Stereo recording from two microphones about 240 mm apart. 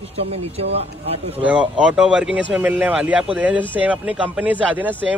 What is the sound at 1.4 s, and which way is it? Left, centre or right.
A man's voice, centre.